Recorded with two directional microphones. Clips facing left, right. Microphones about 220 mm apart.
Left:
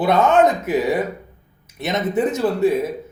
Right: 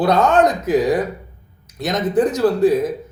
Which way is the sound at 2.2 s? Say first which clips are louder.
Right 2 dB; 25° left (ahead or behind).